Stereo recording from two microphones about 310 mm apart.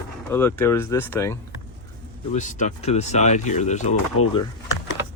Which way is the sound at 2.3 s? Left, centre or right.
Left.